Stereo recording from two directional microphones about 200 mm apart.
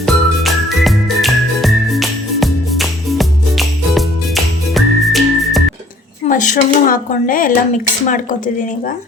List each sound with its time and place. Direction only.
0.0 s music: centre (ahead or behind)
6.2 s speech: 40° left (ahead or behind)